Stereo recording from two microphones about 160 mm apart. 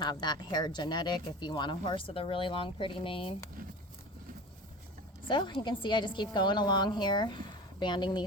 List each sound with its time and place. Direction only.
0.0 s speech: 25° left (ahead or behind)
5.3 s speech: 30° left (ahead or behind)